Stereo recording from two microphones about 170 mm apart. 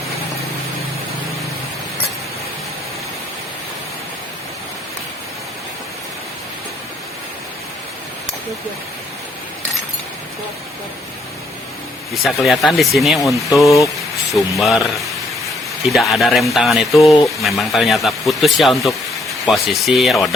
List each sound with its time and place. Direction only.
12.1 s speech: centre (ahead or behind)